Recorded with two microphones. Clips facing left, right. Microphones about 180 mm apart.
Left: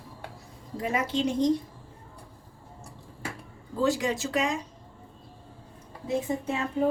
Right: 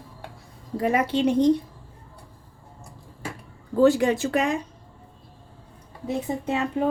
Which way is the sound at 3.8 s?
60° right (ahead or behind).